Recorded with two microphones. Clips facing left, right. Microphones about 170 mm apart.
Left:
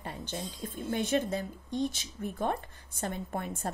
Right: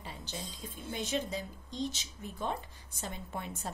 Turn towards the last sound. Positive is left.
turn(degrees=50)  # may be behind; listen again after turning